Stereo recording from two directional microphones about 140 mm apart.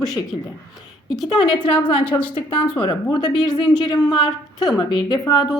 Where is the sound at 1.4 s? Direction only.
35° left (ahead or behind).